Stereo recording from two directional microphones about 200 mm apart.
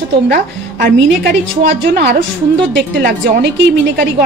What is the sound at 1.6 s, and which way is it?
Speech, 55° right (ahead or behind).